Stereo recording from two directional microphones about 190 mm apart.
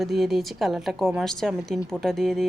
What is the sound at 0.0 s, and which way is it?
Speech, centre (ahead or behind).